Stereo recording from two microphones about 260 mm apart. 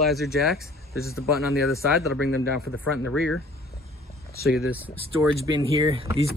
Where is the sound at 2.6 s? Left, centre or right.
Left.